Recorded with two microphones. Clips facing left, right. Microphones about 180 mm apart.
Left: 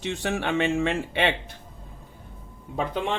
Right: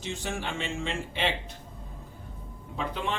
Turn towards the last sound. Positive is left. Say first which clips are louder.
# left 5 dB
turn(degrees=50)  # may be behind; listen again after turning